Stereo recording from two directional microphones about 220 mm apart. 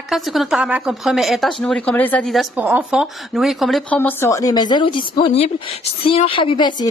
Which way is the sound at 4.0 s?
10° left (ahead or behind).